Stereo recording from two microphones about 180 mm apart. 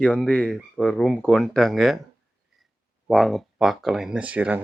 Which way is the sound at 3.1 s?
Centre (ahead or behind).